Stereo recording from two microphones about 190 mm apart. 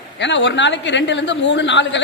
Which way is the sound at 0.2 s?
70° left (ahead or behind).